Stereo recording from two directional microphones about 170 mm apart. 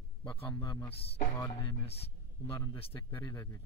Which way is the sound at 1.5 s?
35° left (ahead or behind).